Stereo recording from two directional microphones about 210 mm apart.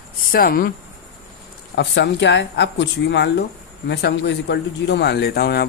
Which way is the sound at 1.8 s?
55° left (ahead or behind).